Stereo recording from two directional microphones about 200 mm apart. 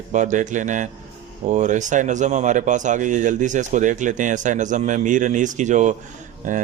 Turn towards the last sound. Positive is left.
turn(degrees=-40)  # may be behind; listen again after turning